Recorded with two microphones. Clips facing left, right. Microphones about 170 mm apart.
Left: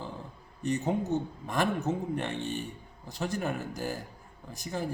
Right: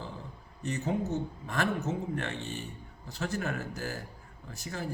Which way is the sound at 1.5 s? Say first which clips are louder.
Left 3 dB; 15° left (ahead or behind).